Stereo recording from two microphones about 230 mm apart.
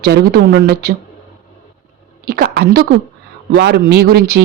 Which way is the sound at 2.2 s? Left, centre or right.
Right.